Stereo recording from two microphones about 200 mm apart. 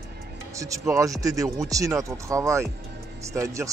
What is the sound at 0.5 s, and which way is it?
A man's voice, 15° right (ahead or behind).